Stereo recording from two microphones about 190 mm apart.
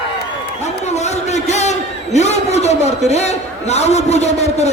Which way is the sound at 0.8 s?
35° left (ahead or behind).